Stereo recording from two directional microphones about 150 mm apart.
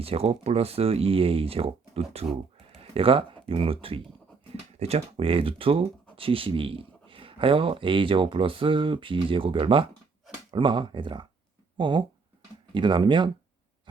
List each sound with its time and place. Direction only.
0.0 s speech: 40° right (ahead or behind)